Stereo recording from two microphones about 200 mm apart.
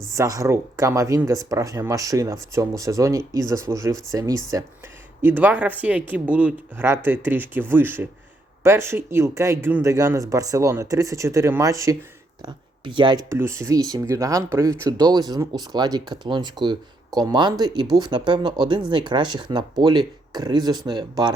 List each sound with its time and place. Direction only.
0.1 s speech: 15° right (ahead or behind)